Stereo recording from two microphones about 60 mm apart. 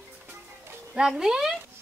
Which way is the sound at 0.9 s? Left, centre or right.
Centre.